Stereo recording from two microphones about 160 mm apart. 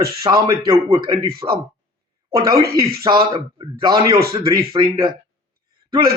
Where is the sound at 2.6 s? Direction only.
70° right (ahead or behind).